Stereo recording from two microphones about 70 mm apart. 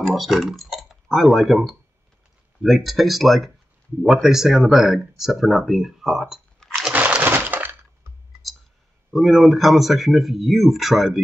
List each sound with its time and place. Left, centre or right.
0.0 s speech: centre
6.9 s breaking: right
9.1 s speech: centre